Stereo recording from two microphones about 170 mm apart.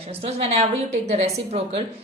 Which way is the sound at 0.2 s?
35° right (ahead or behind).